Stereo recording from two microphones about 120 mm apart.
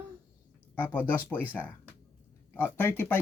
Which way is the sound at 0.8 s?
15° left (ahead or behind).